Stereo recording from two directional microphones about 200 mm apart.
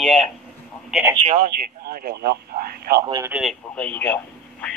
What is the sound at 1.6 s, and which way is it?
Speech, 45° right (ahead or behind).